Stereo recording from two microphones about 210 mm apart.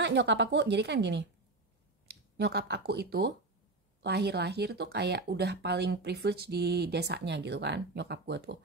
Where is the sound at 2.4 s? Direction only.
50° right (ahead or behind).